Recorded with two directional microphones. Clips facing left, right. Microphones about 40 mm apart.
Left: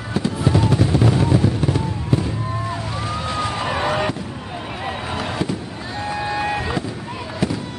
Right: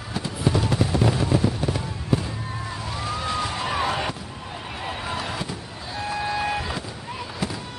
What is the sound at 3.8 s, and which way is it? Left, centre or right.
Fireworks, centre.